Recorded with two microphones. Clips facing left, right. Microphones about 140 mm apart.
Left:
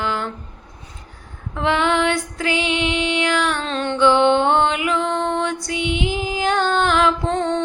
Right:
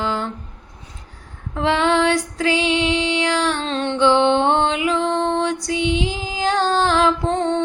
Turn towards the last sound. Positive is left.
turn(degrees=-25)  # may be behind; listen again after turning